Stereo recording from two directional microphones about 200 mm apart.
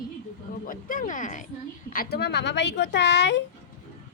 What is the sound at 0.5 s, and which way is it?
A woman's voice, 45° left (ahead or behind).